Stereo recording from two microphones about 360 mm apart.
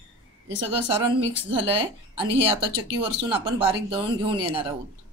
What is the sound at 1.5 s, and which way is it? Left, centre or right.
Speech, centre.